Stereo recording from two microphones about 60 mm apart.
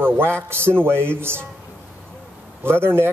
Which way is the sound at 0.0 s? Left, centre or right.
Right.